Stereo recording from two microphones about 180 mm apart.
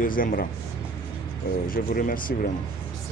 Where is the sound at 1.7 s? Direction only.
50° left (ahead or behind).